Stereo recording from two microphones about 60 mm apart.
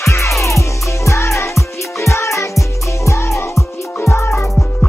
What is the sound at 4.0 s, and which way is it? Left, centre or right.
Music, left.